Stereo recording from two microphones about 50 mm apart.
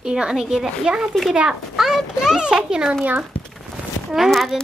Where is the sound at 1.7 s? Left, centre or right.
Centre.